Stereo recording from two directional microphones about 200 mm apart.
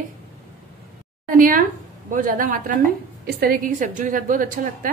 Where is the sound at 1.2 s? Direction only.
45° right (ahead or behind).